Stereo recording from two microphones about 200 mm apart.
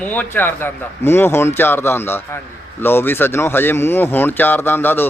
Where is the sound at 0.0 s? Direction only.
10° left (ahead or behind).